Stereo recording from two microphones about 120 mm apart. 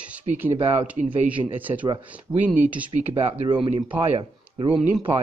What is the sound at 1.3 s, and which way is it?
Speech, 15° right (ahead or behind).